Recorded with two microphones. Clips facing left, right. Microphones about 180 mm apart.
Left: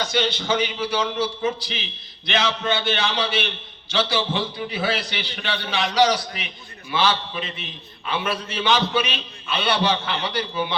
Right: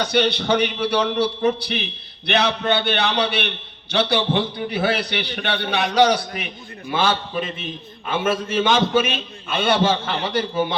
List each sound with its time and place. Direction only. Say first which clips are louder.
0.0 s a man's voice: right 4 dB; 60° right (ahead or behind)